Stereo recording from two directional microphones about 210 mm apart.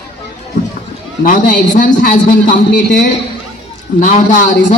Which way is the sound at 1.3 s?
40° left (ahead or behind).